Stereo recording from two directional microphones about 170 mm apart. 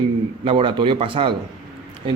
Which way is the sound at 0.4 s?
30° right (ahead or behind).